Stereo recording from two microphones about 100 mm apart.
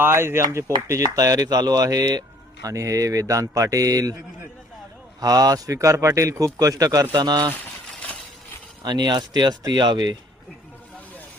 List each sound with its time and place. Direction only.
0.0 s speech: 25° right (ahead or behind)
5.2 s speech: 40° right (ahead or behind)
8.8 s speech: 45° right (ahead or behind)